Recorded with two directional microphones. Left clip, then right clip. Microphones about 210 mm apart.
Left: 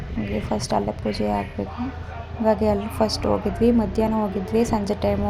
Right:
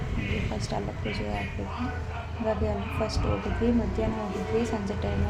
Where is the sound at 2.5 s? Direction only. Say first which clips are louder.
Left 9 dB; 30° left (ahead or behind).